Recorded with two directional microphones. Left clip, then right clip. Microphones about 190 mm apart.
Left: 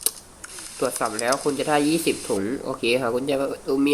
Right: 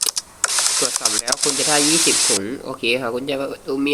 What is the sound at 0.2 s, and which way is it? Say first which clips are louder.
Mechanisms: right 19 dB; 50° right (ahead or behind).